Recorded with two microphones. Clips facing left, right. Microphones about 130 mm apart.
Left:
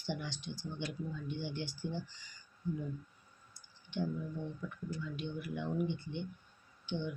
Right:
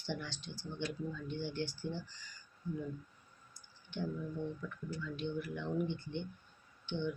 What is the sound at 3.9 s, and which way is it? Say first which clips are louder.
Speech: left 1 dB; 15° left (ahead or behind).